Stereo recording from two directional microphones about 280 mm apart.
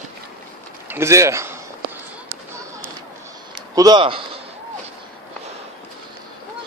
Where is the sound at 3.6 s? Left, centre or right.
Centre.